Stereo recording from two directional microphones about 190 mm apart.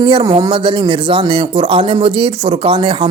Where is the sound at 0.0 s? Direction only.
25° right (ahead or behind).